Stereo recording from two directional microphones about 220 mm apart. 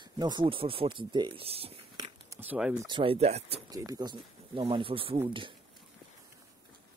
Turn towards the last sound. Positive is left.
turn(degrees=-25)  # may be behind; listen again after turning